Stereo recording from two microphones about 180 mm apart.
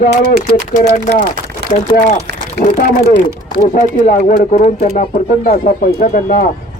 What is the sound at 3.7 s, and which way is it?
Speech, 45° left (ahead or behind).